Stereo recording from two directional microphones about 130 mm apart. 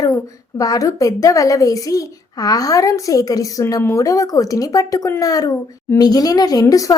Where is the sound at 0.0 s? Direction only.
25° left (ahead or behind).